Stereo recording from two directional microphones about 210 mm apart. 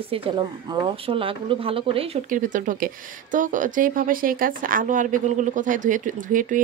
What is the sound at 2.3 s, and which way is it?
Speech, 40° right (ahead or behind).